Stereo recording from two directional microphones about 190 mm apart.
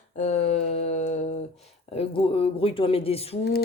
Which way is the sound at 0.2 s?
35° left (ahead or behind).